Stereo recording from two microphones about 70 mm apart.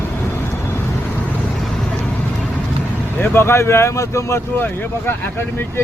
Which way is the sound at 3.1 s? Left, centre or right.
Left.